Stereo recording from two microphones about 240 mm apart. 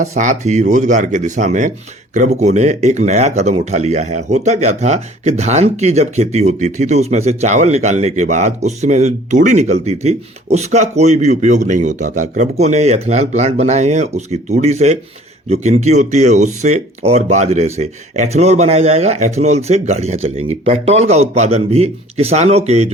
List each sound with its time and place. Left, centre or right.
0.0 s speech: right